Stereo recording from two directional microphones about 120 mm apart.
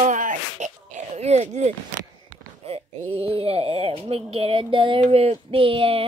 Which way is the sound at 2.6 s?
55° right (ahead or behind).